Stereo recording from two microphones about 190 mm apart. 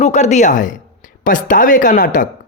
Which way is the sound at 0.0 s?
35° left (ahead or behind).